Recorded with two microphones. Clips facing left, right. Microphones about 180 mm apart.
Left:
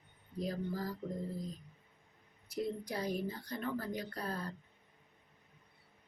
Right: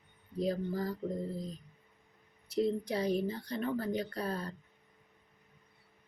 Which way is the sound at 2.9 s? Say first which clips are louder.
Right 5 dB; 25° right (ahead or behind).